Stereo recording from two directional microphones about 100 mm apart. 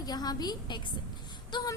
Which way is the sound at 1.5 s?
50° left (ahead or behind).